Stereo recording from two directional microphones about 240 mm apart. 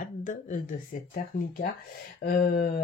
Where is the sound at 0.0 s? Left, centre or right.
Left.